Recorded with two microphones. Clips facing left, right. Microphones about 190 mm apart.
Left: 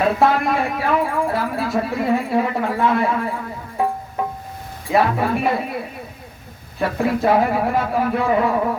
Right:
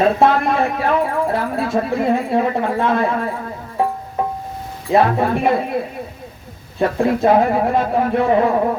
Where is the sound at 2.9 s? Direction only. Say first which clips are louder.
Right 1 dB; 50° right (ahead or behind).